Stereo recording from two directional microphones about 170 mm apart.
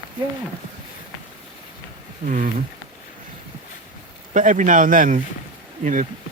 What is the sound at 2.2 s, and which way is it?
Speech, 50° right (ahead or behind).